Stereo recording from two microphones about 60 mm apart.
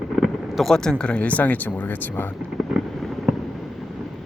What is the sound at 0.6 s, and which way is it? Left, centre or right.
Speech, centre.